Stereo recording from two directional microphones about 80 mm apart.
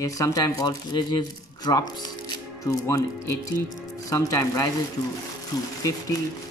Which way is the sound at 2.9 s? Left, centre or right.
Left.